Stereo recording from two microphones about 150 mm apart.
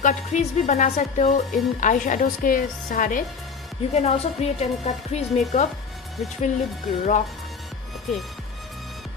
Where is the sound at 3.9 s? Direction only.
45° left (ahead or behind).